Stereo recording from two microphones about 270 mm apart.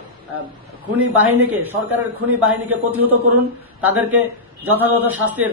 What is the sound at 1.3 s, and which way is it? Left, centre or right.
Speech, right.